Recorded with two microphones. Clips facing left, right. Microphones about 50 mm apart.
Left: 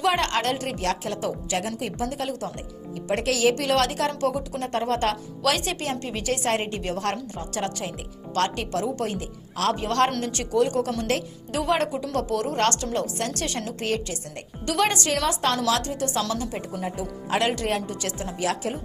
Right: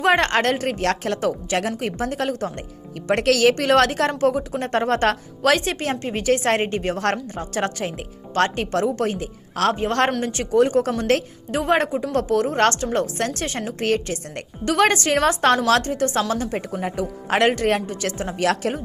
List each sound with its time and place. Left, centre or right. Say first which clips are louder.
0.0 s a woman's voice: right 5 dB; right
3.1 s speech: right 5 dB; right
3.5 s a woman's voice: right 6 dB; right
15.5 s speech: right 6 dB; right
16.6 s a woman's voice: right 5 dB; right
18.3 s speech: right 6 dB; right